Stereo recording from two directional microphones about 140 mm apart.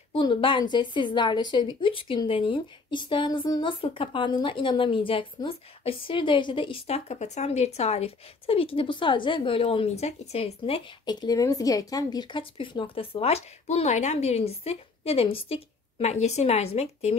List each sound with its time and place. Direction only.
0.1 s a woman's voice: 35° left (ahead or behind)